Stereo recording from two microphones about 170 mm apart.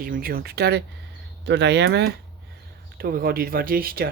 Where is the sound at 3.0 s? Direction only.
65° right (ahead or behind).